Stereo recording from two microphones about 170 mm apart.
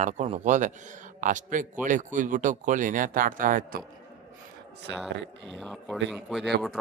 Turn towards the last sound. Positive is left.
turn(degrees=0)  # may be behind; listen again after turning